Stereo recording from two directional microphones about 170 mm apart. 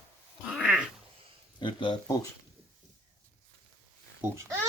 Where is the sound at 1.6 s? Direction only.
30° left (ahead or behind).